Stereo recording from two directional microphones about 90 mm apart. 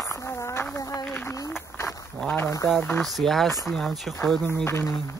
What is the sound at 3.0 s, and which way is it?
Speech, centre (ahead or behind).